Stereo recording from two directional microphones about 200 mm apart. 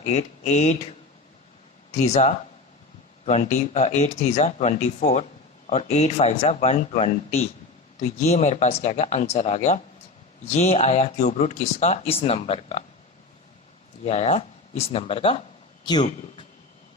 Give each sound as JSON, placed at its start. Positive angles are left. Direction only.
{"t": 0.1, "sound": "speech", "side_deg": 35}
{"t": 2.0, "sound": "speech", "side_deg": 35}
{"t": 14.0, "sound": "speech", "side_deg": 35}